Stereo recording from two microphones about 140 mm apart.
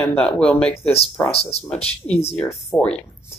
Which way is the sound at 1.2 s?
45° left (ahead or behind).